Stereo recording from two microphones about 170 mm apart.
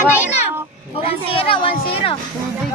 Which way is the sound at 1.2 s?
35° left (ahead or behind).